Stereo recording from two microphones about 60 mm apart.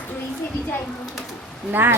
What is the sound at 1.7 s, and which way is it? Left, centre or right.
Speech, right.